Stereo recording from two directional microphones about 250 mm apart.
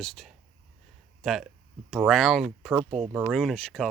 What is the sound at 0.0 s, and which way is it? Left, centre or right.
Speech, centre.